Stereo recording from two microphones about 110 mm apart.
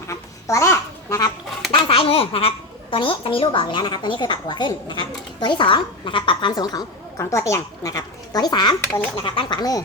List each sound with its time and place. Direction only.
0.1 s babbling: 25° left (ahead or behind)
1.7 s a child's voice: 55° left (ahead or behind); by 9.8 s 35° left (ahead or behind)